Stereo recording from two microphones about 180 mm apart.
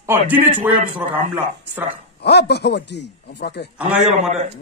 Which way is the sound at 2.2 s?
65° left (ahead or behind).